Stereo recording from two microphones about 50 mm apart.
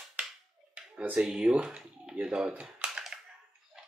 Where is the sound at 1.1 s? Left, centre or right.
Centre.